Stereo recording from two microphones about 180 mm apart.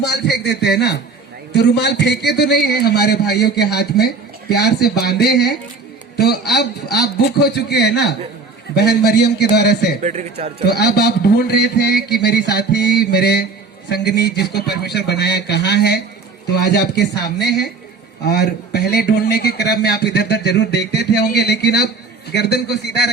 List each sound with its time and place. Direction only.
0.0 s a man's voice: 65° left (ahead or behind)
10.0 s speech: 40° right (ahead or behind)
10.6 s a man's voice: 65° left (ahead or behind)